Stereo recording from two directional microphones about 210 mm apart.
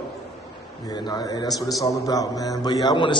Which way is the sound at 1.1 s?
20° left (ahead or behind).